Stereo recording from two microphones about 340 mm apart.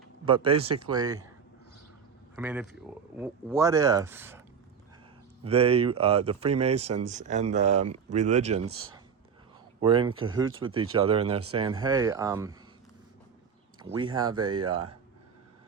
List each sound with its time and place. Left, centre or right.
0.3 s speech: centre
2.3 s speech: centre
5.4 s speech: centre
9.8 s speech: centre
10.1 s speech: right
10.6 s speech: centre
13.7 s speech: centre